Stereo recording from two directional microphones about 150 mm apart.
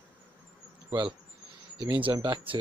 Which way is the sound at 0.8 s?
35° right (ahead or behind).